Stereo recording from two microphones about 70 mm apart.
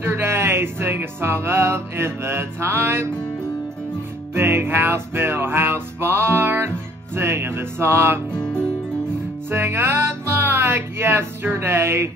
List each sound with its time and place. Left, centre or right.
0.0 s music: right
4.3 s music: right
9.5 s music: right